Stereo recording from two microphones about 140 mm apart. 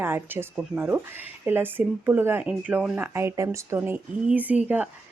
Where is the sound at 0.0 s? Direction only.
15° right (ahead or behind).